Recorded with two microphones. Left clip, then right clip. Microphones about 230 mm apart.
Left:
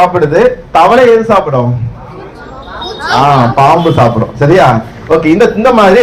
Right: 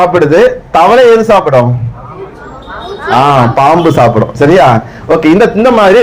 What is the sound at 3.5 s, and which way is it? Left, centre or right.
A man's voice, right.